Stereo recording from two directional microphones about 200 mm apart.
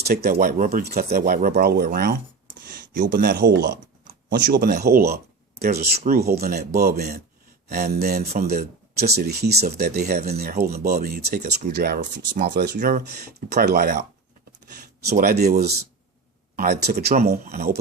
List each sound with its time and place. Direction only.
0.0 s speech: 50° right (ahead or behind)
15.2 s speech: 50° right (ahead or behind)